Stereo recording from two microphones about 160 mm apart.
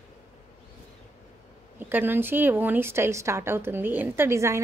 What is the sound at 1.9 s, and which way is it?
Speech, 10° right (ahead or behind).